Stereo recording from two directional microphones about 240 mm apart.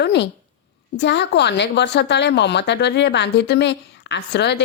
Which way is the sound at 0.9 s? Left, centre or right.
Left.